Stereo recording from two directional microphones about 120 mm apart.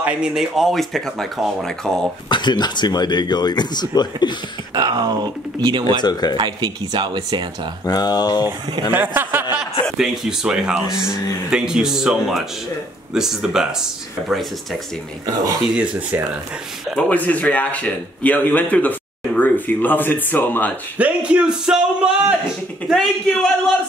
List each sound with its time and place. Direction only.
0.0 s speech: 10° right (ahead or behind)
2.2 s speech: 40° left (ahead or behind)
4.7 s speech: 35° right (ahead or behind)
5.9 s speech: 35° left (ahead or behind)
6.3 s speech: 40° right (ahead or behind)
7.8 s speech: 35° left (ahead or behind)
8.9 s a sound: 15° right (ahead or behind)
9.6 s a man's voice: 5° right (ahead or behind)
15.6 s speech: 5° right (ahead or behind)
16.9 s speech: 10° left (ahead or behind)
21.0 s speech: 10° right (ahead or behind)